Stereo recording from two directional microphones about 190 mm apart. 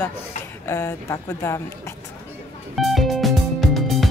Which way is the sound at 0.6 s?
15° left (ahead or behind).